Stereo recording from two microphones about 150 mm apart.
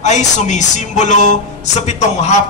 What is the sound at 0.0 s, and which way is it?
Speech, 50° left (ahead or behind).